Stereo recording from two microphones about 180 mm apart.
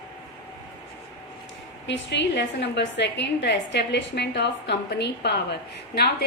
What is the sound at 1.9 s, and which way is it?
A woman's voice, 75° left (ahead or behind).